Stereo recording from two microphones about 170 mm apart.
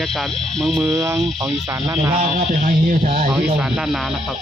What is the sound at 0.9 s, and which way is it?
Speech, 20° right (ahead or behind).